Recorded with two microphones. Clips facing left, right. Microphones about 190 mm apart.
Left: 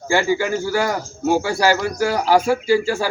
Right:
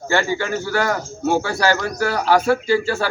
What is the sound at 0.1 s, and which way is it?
A man's voice, 10° left (ahead or behind).